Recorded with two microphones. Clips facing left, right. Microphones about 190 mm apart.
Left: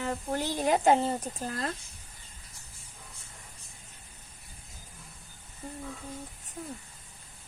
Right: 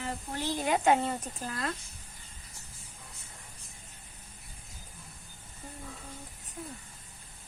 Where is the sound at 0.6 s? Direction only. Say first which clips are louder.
Left 2 dB; 35° left (ahead or behind).